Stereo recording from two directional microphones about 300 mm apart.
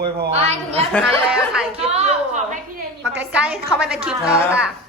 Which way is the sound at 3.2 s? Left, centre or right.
Centre.